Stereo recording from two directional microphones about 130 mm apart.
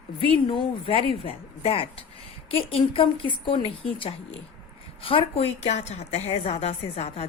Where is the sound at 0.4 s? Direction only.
40° left (ahead or behind).